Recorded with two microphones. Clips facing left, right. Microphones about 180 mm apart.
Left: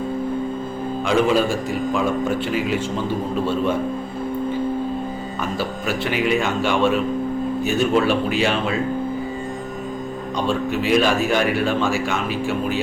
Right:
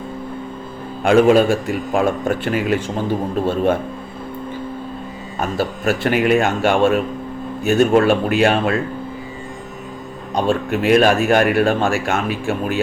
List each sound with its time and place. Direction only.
1.0 s a man's voice: 60° right (ahead or behind)
5.4 s speech: 50° right (ahead or behind)
10.3 s speech: 55° right (ahead or behind)